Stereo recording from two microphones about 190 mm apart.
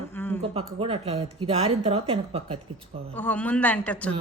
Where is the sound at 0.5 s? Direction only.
30° right (ahead or behind).